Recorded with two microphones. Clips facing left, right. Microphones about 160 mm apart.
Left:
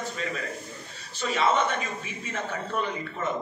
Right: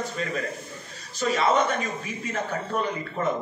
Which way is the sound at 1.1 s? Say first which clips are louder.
Right 2 dB; 40° right (ahead or behind).